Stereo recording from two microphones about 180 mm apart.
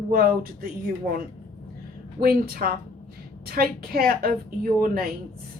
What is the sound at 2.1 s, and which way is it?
A woman's voice, 55° right (ahead or behind).